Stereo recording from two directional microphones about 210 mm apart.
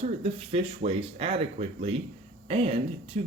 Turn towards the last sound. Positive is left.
turn(degrees=-25)  # may be behind; listen again after turning